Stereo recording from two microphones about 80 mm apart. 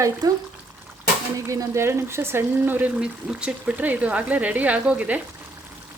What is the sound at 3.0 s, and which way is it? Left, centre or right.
Speech, centre.